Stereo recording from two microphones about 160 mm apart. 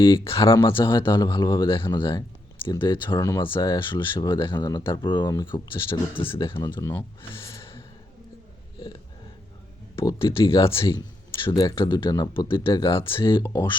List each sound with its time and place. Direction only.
0.0 s speech: 35° left (ahead or behind)
7.4 s gasp: 30° left (ahead or behind)
9.9 s speech: 35° left (ahead or behind)
13.4 s speech: 15° left (ahead or behind)